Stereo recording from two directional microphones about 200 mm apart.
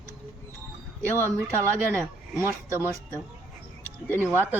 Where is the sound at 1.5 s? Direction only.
15° right (ahead or behind).